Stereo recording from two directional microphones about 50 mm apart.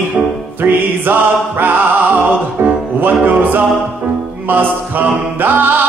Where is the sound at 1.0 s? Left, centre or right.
Right.